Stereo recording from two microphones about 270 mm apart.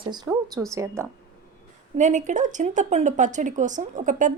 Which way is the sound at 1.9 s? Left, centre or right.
Right.